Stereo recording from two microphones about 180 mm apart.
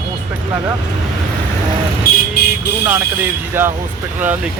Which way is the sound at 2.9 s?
10° right (ahead or behind).